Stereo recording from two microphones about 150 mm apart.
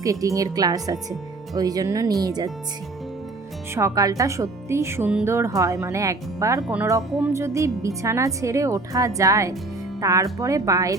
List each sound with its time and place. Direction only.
0.0 s speech: 20° right (ahead or behind)
3.8 s speech: 20° right (ahead or behind)
6.6 s speech: 10° right (ahead or behind)